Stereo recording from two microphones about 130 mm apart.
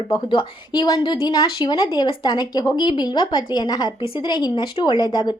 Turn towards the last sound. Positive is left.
turn(degrees=35)  # may be behind; listen again after turning